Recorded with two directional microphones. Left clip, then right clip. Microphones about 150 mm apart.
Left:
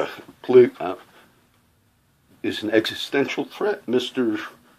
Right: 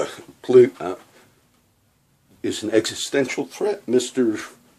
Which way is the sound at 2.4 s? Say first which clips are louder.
Even; 20° right (ahead or behind).